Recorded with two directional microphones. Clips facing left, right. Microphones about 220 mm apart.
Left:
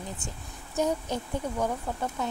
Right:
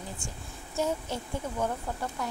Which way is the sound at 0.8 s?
15° left (ahead or behind).